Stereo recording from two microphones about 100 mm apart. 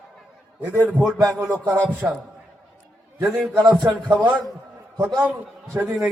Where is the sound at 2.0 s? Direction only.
15° right (ahead or behind).